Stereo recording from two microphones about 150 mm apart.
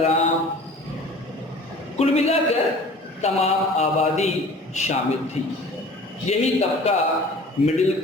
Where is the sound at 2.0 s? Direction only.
40° left (ahead or behind).